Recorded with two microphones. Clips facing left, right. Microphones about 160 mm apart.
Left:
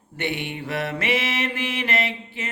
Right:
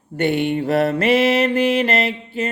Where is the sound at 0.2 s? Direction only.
45° right (ahead or behind).